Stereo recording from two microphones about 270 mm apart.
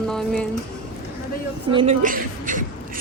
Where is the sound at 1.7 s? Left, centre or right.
Right.